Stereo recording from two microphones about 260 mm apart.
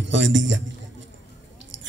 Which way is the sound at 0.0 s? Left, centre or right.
Right.